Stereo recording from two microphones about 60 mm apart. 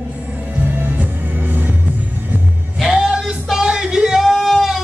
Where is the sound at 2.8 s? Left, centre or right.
Centre.